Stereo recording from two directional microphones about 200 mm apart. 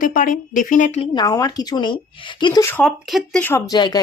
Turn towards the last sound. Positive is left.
turn(degrees=20)  # may be behind; listen again after turning